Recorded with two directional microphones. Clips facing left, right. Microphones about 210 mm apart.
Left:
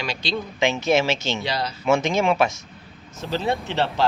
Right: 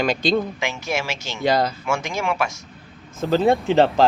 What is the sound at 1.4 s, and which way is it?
Speech, 50° right (ahead or behind).